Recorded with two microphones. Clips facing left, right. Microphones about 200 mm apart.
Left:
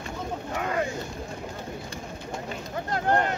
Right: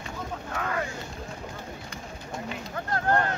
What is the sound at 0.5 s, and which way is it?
Boat, 20° left (ahead or behind).